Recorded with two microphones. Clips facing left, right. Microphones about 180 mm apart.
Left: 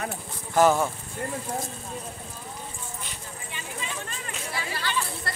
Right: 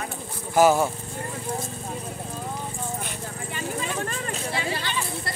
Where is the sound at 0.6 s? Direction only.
5° right (ahead or behind).